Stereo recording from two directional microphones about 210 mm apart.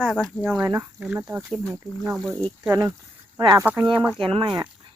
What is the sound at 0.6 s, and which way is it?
Speech, 15° right (ahead or behind).